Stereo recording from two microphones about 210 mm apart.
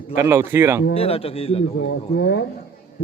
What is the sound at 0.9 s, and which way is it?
Speech, 30° left (ahead or behind).